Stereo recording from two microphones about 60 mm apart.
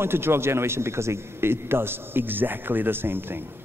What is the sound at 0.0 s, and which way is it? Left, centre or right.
A man's voice, right.